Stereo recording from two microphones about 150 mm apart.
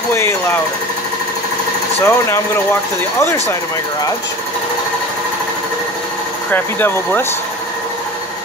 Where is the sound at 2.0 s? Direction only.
15° left (ahead or behind).